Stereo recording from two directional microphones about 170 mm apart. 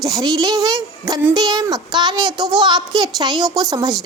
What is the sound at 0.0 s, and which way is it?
A child's voice, 20° right (ahead or behind).